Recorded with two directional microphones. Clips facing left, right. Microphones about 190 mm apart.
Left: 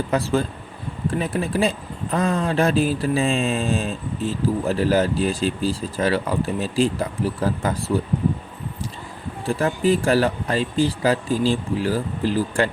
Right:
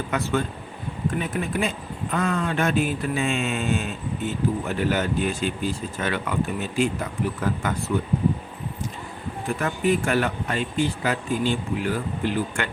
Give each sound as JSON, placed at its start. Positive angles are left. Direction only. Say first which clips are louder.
{"t": 0.1, "sound": "speech", "louder": "left 3 dB", "side_deg": 30}
{"t": 9.5, "sound": "speech", "louder": "left 4 dB", "side_deg": 30}